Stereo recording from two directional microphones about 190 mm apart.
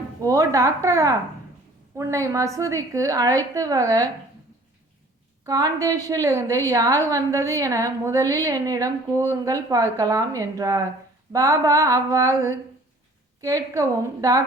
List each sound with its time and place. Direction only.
0.2 s a woman's voice: 15° right (ahead or behind)
5.4 s a woman's voice: 20° right (ahead or behind)